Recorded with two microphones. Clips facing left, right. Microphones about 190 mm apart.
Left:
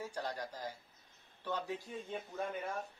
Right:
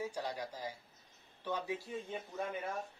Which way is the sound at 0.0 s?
10° right (ahead or behind).